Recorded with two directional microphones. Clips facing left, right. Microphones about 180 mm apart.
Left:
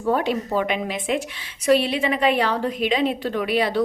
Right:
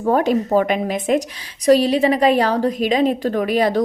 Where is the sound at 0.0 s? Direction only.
45° right (ahead or behind).